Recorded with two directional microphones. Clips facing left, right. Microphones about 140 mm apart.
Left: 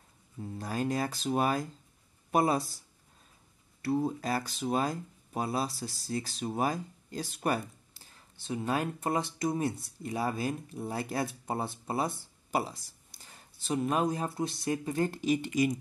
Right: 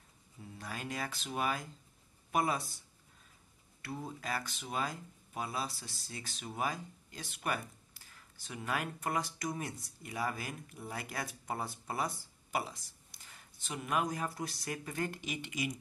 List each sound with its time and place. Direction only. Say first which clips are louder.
0.4 s speech: left 10 dB; 40° left (ahead or behind)
3.8 s speech: left 12 dB; 35° left (ahead or behind)